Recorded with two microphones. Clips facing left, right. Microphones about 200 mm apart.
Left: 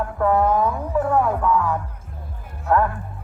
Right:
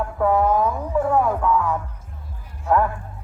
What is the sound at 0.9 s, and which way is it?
Music, centre (ahead or behind).